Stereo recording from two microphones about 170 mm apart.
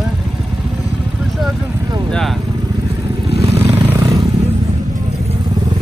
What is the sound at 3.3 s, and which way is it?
Vehicle, 35° right (ahead or behind).